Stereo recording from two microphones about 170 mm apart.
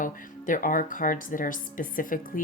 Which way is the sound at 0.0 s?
50° left (ahead or behind).